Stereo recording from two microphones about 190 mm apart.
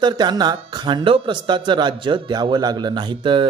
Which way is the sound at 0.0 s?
25° right (ahead or behind).